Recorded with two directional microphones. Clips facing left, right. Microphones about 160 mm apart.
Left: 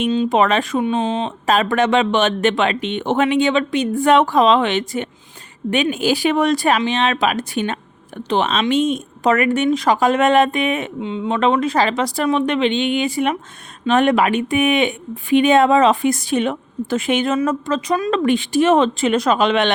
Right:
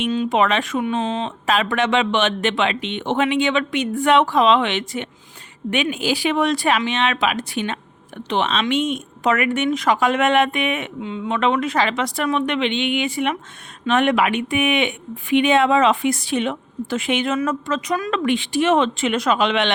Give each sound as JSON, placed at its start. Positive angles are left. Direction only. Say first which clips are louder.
{"t": 0.3, "sound": "speech", "louder": "left 3 dB", "side_deg": 40}
{"t": 11.0, "sound": "speech", "louder": "left 3 dB", "side_deg": 25}
{"t": 11.3, "sound": "speech", "louder": "left 3 dB", "side_deg": 35}
{"t": 18.2, "sound": "speech", "louder": "left 3 dB", "side_deg": 45}